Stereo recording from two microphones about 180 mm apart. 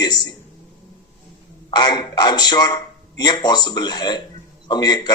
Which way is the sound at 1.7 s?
25° left (ahead or behind).